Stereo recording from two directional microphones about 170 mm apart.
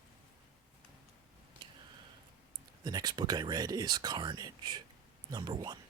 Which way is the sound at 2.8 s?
25° right (ahead or behind).